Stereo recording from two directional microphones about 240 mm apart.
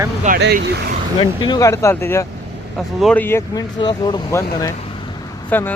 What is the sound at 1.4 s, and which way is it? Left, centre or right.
Speech, centre.